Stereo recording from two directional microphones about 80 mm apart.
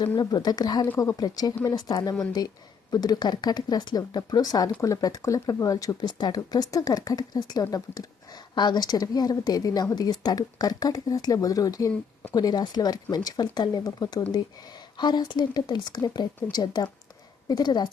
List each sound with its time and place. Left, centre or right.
0.2 s speech: left
6.1 s speech: left